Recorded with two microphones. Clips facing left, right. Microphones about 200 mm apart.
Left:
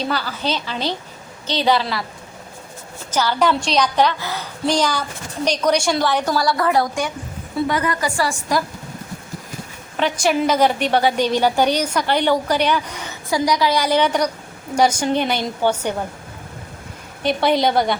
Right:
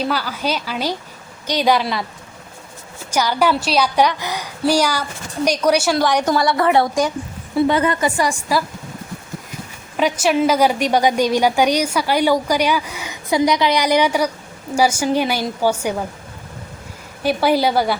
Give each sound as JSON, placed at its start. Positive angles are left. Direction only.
{"t": 0.0, "sound": "a woman's voice", "side_deg": -10}
{"t": 3.1, "sound": "a woman's voice", "side_deg": -10}
{"t": 6.1, "sound": "a woman's voice", "side_deg": -15}
{"t": 10.0, "sound": "a woman's voice", "side_deg": -5}
{"t": 13.3, "sound": "a woman's voice", "side_deg": -20}
{"t": 17.2, "sound": "a woman's voice", "side_deg": -5}